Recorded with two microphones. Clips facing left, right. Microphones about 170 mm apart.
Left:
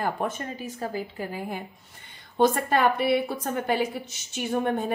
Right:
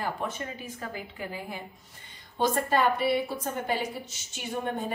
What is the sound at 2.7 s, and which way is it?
A woman's voice, 60° left (ahead or behind).